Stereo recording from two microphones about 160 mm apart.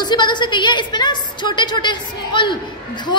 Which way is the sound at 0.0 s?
30° left (ahead or behind).